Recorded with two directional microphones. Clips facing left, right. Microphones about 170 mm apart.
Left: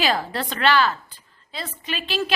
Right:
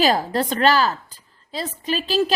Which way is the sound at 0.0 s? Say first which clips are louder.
Right 5 dB; 40° right (ahead or behind).